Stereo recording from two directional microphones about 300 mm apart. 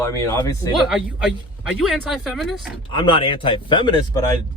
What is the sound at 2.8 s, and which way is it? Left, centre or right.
Speech, centre.